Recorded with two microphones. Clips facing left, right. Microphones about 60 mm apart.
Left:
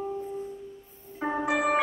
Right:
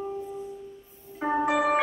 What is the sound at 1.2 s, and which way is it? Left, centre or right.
Music, centre.